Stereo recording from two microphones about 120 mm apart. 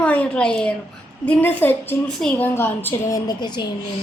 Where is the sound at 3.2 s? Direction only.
35° left (ahead or behind).